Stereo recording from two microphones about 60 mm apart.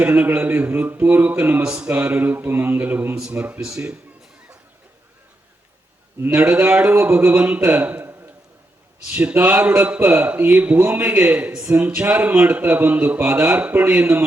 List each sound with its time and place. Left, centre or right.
0.0 s a man's voice: right
1.6 s a sound: centre; by 3.2 s right
3.2 s speech: centre
6.3 s a man's voice: right
6.9 s a sound: right
7.3 s a man's voice: right
9.0 s a man's voice: centre
13.4 s speech: centre
13.7 s a sound: right